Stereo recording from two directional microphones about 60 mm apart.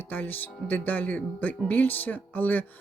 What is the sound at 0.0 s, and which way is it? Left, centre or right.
Speech, left.